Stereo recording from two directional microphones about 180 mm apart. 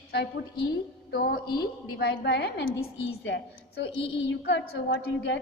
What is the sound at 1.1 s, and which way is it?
A woman's voice, 60° left (ahead or behind).